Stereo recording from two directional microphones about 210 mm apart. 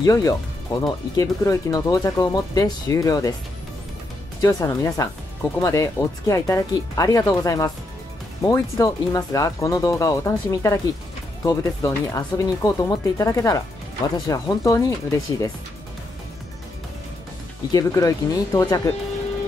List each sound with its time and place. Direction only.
0.0 s speech: 15° left (ahead or behind)
4.4 s speech: 15° left (ahead or behind)
17.7 s speech: 15° left (ahead or behind)